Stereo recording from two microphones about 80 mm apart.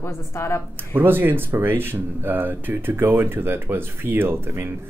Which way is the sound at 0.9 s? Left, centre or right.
Right.